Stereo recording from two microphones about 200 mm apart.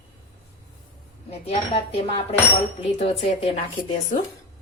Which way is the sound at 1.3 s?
30° left (ahead or behind).